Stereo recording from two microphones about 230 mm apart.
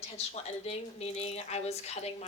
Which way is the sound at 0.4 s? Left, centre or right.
Left.